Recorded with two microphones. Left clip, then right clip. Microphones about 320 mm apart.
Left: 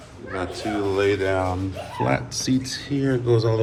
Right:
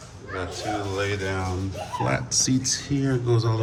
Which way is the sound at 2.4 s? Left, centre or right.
Centre.